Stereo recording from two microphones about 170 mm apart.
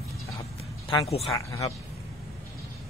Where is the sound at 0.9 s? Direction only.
35° left (ahead or behind).